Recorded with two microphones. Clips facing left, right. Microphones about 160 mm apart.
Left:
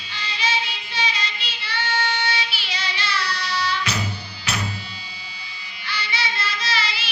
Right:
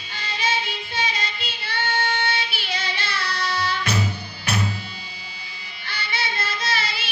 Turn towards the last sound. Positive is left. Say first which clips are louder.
# even
turn(degrees=-50)  # may be behind; listen again after turning